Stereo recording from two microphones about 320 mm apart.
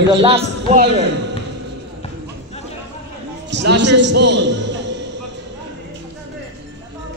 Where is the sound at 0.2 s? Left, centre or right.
Centre.